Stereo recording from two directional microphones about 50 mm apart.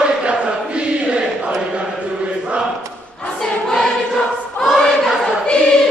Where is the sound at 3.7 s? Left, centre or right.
Centre.